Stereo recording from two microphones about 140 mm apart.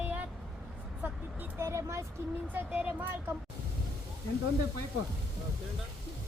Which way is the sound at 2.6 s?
10° right (ahead or behind).